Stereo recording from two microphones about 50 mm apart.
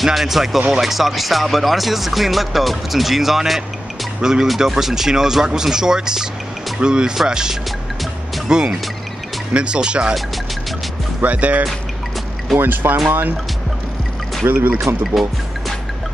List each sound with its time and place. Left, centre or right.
0.0 s speech: centre
11.1 s speech: right
12.5 s speech: right
14.5 s speech: right